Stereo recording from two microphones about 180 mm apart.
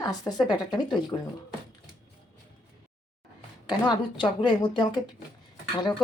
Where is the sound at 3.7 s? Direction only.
25° left (ahead or behind).